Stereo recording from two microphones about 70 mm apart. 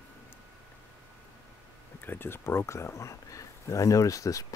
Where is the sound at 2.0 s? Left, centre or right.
Left.